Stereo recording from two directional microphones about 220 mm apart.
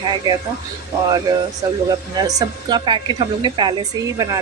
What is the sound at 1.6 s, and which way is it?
A woman's voice, 15° right (ahead or behind).